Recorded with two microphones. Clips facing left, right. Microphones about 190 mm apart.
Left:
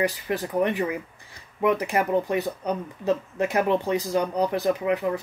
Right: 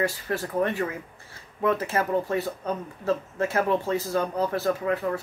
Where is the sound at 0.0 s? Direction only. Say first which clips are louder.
Left 2 dB; 15° left (ahead or behind).